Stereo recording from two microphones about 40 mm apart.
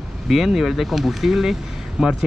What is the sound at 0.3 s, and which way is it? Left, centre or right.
Speech, centre.